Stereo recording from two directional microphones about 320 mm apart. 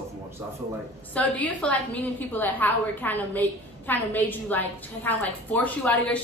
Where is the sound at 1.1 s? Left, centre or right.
Centre.